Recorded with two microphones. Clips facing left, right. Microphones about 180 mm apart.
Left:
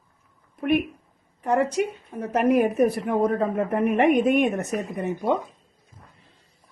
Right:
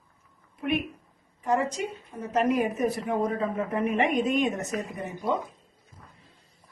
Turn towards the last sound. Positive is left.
turn(degrees=65)  # may be behind; listen again after turning